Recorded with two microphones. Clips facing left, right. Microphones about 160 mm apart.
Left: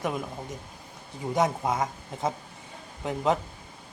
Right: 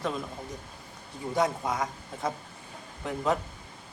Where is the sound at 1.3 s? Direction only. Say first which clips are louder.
Left 2 dB; 20° left (ahead or behind).